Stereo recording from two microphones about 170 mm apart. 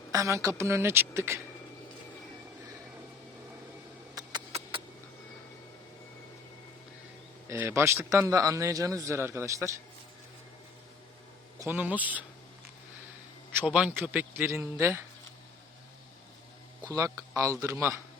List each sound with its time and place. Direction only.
0.1 s a man's voice: 20° right (ahead or behind)
4.1 s a sound: 20° right (ahead or behind)
7.4 s a man's voice: 15° right (ahead or behind)
11.6 s a man's voice: 10° right (ahead or behind)
13.6 s a man's voice: 10° right (ahead or behind)
16.9 s a man's voice: 20° right (ahead or behind)